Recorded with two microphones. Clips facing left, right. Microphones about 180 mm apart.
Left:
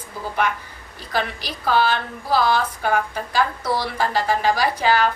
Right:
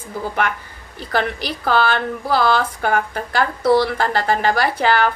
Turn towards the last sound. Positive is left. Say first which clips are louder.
# right 2 dB
turn(degrees=-60)  # may be behind; listen again after turning